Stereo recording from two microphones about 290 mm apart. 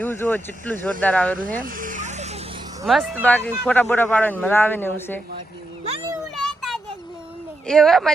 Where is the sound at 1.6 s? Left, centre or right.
Right.